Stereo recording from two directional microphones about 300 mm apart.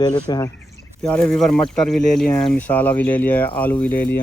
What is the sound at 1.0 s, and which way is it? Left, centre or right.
Speech, centre.